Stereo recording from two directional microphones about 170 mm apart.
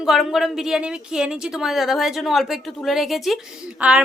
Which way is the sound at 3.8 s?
5° right (ahead or behind).